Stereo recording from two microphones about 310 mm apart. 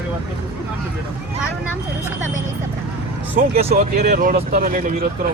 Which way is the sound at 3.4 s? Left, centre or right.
Right.